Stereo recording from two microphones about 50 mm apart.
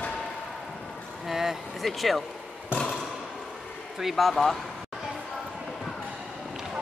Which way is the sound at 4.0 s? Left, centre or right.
Centre.